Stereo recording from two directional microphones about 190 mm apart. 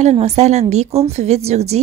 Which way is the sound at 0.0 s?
35° right (ahead or behind).